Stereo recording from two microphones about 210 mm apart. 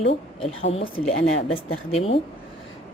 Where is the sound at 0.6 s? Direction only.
25° left (ahead or behind).